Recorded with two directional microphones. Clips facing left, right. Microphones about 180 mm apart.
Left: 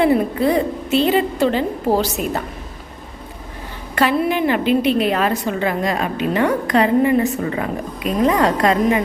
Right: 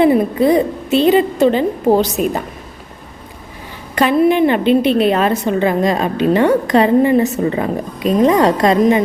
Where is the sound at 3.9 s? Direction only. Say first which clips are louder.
Right 5 dB; 20° right (ahead or behind).